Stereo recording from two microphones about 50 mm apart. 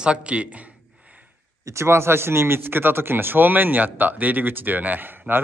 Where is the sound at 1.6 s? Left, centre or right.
Right.